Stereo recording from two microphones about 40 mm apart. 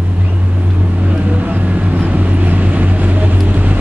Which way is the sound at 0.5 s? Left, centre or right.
Right.